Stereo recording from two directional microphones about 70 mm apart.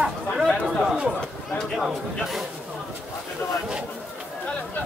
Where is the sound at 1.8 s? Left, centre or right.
Centre.